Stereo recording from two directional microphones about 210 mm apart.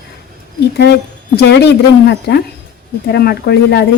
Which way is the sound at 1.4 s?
55° left (ahead or behind).